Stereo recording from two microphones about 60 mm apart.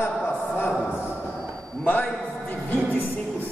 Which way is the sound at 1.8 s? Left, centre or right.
Left.